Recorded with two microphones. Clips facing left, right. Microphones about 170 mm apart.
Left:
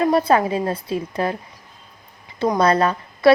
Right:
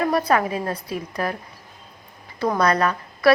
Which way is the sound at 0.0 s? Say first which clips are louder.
Left 3 dB; 25° left (ahead or behind).